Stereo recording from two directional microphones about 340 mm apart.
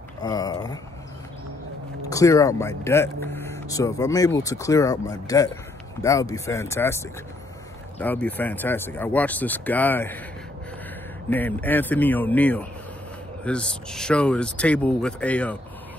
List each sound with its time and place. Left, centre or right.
0.2 s a sound: centre
2.0 s speech: centre
11.2 s speech: centre